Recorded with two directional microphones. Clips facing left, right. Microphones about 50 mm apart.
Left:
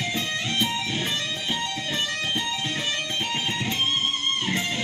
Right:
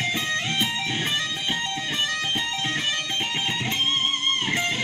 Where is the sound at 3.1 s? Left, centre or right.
Centre.